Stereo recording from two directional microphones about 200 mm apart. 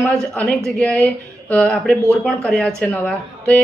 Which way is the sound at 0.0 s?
5° left (ahead or behind).